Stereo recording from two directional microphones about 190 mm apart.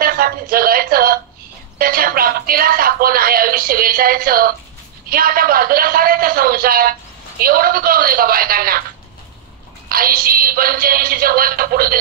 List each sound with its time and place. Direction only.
0.0 s a sound: 50° right (ahead or behind)
5.1 s a man's voice: 50° right (ahead or behind)
9.8 s a man's voice: 50° right (ahead or behind)